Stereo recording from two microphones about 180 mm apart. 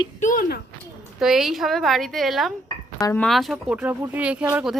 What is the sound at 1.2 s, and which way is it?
Speech, centre (ahead or behind).